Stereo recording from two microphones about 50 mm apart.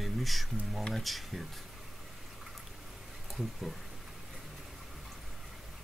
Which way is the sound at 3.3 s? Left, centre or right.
Centre.